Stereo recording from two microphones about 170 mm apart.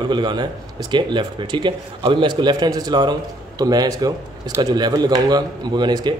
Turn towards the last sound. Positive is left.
turn(degrees=-25)  # may be behind; listen again after turning